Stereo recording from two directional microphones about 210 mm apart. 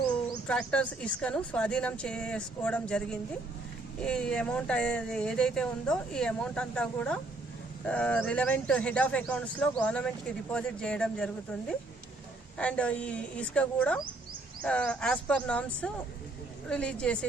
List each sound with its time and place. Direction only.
0.4 s speech: 5° left (ahead or behind)
12.5 s speech: 5° left (ahead or behind)